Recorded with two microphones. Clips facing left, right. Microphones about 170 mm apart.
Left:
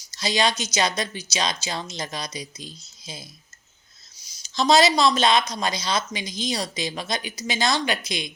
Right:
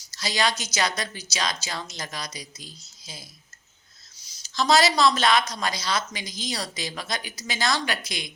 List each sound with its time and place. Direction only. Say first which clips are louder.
0.1 s speech: left 3 dB; 20° left (ahead or behind)
4.4 s speech: left 3 dB; 20° left (ahead or behind)